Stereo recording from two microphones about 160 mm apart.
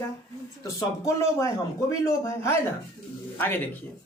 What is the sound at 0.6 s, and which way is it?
Speech, 20° left (ahead or behind).